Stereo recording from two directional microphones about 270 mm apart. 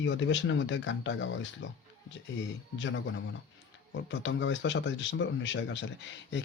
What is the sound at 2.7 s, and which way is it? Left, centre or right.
Speech, left.